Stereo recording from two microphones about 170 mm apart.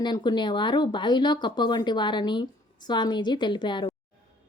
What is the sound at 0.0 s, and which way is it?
A woman's voice, 25° left (ahead or behind).